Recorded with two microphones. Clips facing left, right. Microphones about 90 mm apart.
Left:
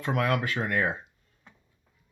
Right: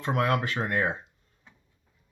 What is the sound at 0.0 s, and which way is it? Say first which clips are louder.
Speech: right 1 dB; 30° right (ahead or behind).